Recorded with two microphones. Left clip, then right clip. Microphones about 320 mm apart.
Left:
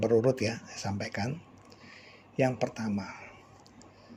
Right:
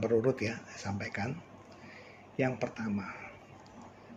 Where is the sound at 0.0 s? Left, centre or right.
Left.